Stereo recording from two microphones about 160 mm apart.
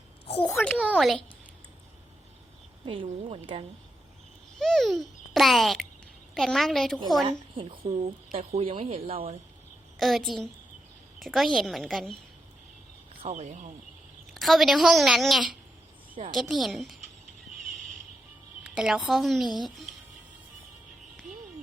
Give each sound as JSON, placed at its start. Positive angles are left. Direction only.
{"t": 0.5, "sound": "a woman's voice", "side_deg": 5}
{"t": 2.8, "sound": "speech", "side_deg": -30}
{"t": 4.6, "sound": "a child's voice", "side_deg": 0}
{"t": 7.3, "sound": "speech", "side_deg": -30}
{"t": 10.0, "sound": "a woman's voice", "side_deg": 0}
{"t": 13.2, "sound": "speech", "side_deg": -45}
{"t": 14.3, "sound": "a woman's voice", "side_deg": 0}
{"t": 18.6, "sound": "a woman's voice", "side_deg": -5}